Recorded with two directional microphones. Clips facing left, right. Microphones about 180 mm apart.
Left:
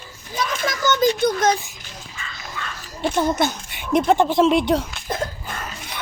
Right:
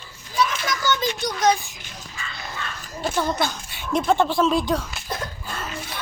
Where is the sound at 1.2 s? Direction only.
50° left (ahead or behind).